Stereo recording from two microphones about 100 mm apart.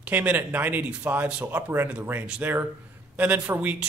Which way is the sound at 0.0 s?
15° right (ahead or behind).